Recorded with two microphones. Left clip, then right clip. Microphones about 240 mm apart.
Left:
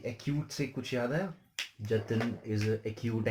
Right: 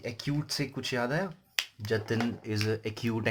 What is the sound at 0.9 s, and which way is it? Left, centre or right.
Speech, right.